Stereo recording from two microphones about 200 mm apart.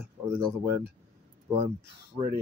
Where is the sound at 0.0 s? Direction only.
5° left (ahead or behind).